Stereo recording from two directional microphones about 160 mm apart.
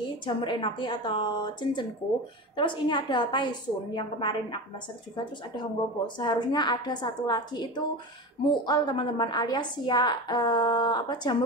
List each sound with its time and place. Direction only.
0.3 s a woman's voice: 30° left (ahead or behind)
6.1 s a woman's voice: 25° left (ahead or behind)